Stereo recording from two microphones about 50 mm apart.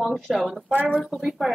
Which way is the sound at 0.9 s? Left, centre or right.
Centre.